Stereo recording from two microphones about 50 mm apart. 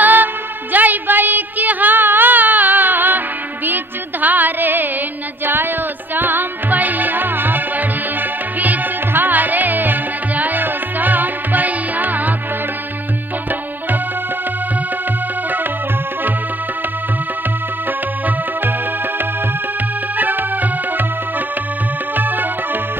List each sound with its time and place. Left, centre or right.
0.0 s music: right
0.7 s a sound: right
3.6 s music: right
20.2 s music: right
22.1 s music: right